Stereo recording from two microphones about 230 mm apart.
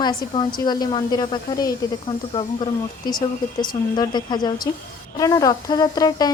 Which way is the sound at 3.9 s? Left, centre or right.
Centre.